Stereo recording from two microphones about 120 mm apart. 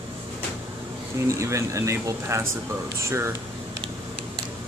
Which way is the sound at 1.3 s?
25° right (ahead or behind).